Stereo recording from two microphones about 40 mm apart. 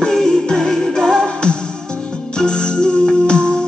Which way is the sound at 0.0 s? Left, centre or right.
Centre.